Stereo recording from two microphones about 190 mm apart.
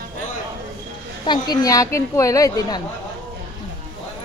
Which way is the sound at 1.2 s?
20° left (ahead or behind).